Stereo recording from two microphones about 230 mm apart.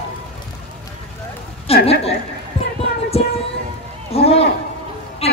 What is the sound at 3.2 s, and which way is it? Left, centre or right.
Music, left.